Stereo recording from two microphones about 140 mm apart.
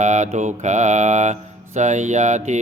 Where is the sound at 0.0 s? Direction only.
60° right (ahead or behind).